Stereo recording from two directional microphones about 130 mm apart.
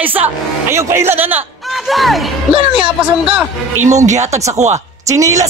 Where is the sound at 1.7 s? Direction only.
Centre (ahead or behind).